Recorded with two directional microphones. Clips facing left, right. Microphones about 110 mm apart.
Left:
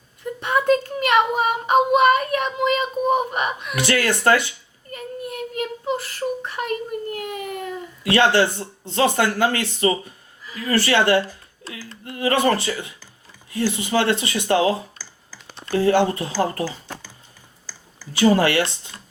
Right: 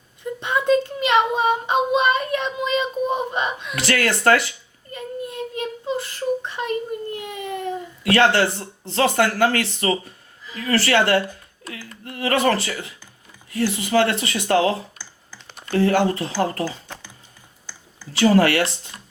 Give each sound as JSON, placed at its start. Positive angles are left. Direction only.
{"t": 0.2, "sound": "child singing", "side_deg": -20}
{"t": 3.3, "sound": "whimper", "side_deg": -20}
{"t": 3.8, "sound": "speech", "side_deg": 25}
{"t": 4.9, "sound": "child singing", "side_deg": -25}
{"t": 6.0, "sound": "whimper", "side_deg": -20}
{"t": 7.3, "sound": "a sound", "side_deg": -25}
{"t": 8.1, "sound": "speech", "side_deg": 25}
{"t": 11.6, "sound": "a sound", "side_deg": 30}
{"t": 13.5, "sound": "speech", "side_deg": 25}
{"t": 18.2, "sound": "speech", "side_deg": 25}